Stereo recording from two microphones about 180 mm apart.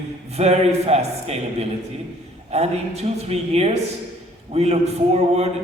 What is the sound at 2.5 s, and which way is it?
A man's voice, 35° right (ahead or behind).